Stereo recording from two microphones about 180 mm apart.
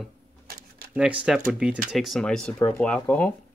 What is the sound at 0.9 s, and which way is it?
Speech, 5° right (ahead or behind).